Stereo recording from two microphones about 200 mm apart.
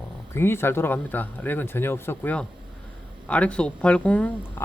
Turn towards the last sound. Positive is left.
turn(degrees=10)  # may be behind; listen again after turning